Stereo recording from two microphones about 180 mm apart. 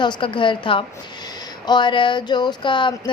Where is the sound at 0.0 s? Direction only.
25° left (ahead or behind).